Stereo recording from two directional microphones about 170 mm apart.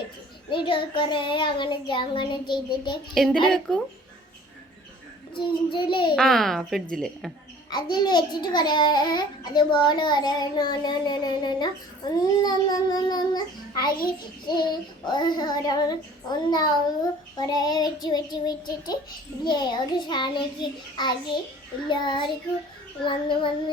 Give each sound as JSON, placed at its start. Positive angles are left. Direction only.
{"t": 0.5, "sound": "a child's voice", "side_deg": 30}
{"t": 3.2, "sound": "speech", "side_deg": 0}
{"t": 5.3, "sound": "a child's voice", "side_deg": 30}
{"t": 6.1, "sound": "speech", "side_deg": 0}
{"t": 7.7, "sound": "a child's voice", "side_deg": 25}
{"t": 13.9, "sound": "a child's voice", "side_deg": 60}
{"t": 14.4, "sound": "a child's voice", "side_deg": 25}